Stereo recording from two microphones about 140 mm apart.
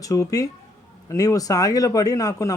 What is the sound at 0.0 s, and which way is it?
Speech, 25° left (ahead or behind).